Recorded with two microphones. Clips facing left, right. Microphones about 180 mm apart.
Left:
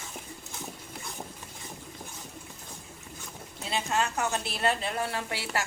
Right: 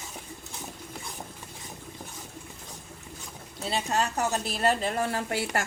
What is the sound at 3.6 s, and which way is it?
A woman's voice, 35° right (ahead or behind).